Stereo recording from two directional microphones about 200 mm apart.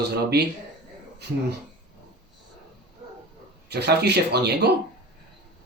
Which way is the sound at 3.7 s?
55° right (ahead or behind).